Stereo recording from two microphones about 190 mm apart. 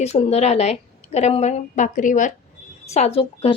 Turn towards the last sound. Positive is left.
turn(degrees=30)  # may be behind; listen again after turning